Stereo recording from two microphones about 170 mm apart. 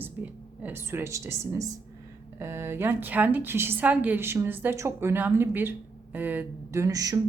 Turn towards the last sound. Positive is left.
turn(degrees=-20)  # may be behind; listen again after turning